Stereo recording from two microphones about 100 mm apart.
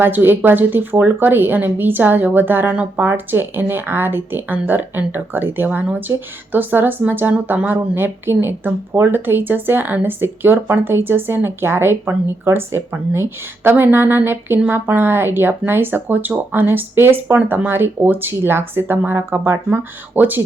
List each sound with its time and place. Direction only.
0.0 s speech: 20° right (ahead or behind)